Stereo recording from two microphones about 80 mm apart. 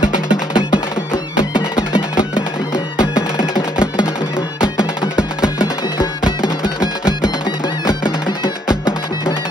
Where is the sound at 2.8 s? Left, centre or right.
Centre.